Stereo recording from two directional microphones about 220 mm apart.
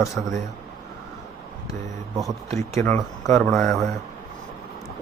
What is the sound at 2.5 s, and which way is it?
Speech, 30° right (ahead or behind).